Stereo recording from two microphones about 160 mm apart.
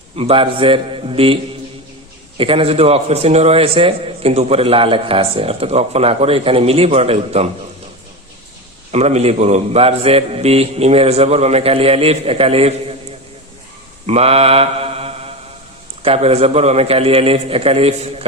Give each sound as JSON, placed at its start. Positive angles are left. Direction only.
{"t": 0.2, "sound": "a man's voice", "side_deg": -35}
{"t": 2.4, "sound": "a man's voice", "side_deg": -35}
{"t": 8.9, "sound": "a man's voice", "side_deg": -40}
{"t": 14.1, "sound": "mantra", "side_deg": -40}
{"t": 16.0, "sound": "a man's voice", "side_deg": -40}